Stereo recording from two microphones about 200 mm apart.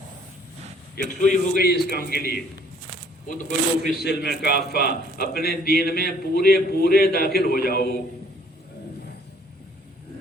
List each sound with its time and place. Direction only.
0.9 s a man's voice: 40° left (ahead or behind)
4.0 s a man's voice: 55° left (ahead or behind)